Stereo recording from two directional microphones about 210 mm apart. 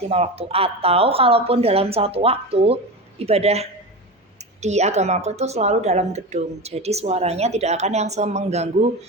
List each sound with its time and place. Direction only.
0.1 s a woman's voice: 30° right (ahead or behind)